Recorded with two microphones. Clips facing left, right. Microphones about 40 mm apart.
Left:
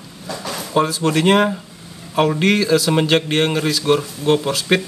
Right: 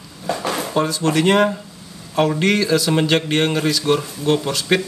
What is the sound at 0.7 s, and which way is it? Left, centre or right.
Speech, centre.